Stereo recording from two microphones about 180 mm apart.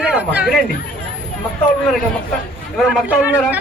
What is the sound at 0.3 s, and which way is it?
Speech, 5° right (ahead or behind).